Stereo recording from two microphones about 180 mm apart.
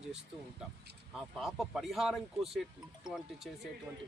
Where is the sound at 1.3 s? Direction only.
Centre (ahead or behind).